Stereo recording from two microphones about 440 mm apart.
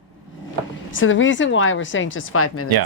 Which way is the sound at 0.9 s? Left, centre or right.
Left.